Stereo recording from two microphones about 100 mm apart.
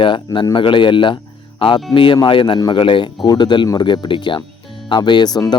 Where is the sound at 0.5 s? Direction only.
55° left (ahead or behind).